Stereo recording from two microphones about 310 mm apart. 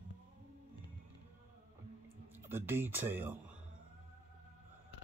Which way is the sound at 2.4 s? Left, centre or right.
Centre.